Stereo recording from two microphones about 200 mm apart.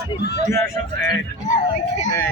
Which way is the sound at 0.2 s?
55° left (ahead or behind).